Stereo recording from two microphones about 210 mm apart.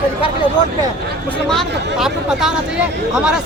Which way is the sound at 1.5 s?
Centre (ahead or behind).